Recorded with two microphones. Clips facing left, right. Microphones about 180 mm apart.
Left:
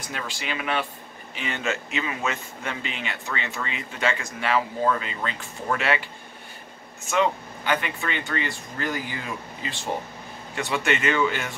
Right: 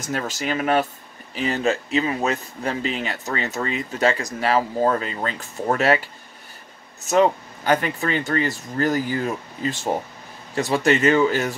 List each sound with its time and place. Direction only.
0.0 s speech: 45° right (ahead or behind)